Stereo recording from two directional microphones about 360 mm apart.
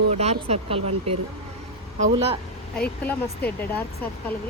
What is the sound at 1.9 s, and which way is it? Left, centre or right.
Speech, centre.